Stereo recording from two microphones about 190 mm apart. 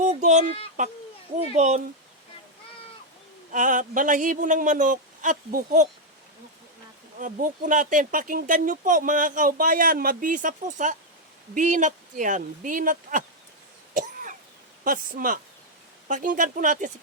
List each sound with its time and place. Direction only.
0.0 s a sound: 40° right (ahead or behind)
0.8 s speech: 40° right (ahead or behind)
3.5 s speech: 40° right (ahead or behind)
7.2 s speech: 45° right (ahead or behind)
13.9 s cough: 45° right (ahead or behind)
14.8 s speech: 45° right (ahead or behind)